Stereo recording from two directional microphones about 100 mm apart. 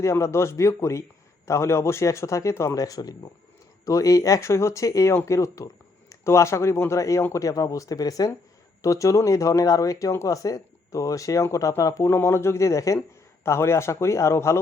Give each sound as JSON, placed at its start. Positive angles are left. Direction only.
{"t": 0.0, "sound": "speech", "side_deg": 30}